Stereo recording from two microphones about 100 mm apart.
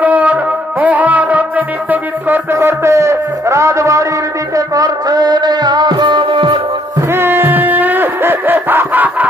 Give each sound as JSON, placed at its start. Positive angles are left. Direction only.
{"t": 0.0, "sound": "music", "side_deg": -15}
{"t": 2.5, "sound": "music", "side_deg": -30}
{"t": 7.0, "sound": "music", "side_deg": -25}